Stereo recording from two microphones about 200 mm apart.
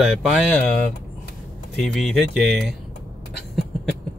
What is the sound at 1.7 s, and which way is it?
Speech, centre (ahead or behind).